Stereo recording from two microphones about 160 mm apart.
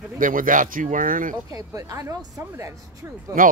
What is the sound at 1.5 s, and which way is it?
Speech, 20° right (ahead or behind).